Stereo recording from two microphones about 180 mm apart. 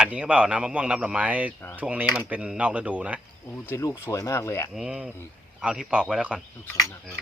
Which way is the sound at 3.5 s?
10° left (ahead or behind).